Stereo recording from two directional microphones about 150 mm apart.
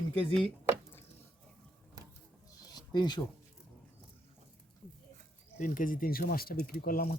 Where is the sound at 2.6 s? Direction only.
30° left (ahead or behind).